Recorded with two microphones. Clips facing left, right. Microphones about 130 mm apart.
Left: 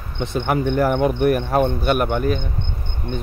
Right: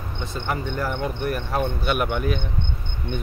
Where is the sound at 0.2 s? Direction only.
65° left (ahead or behind); by 2.4 s 40° left (ahead or behind).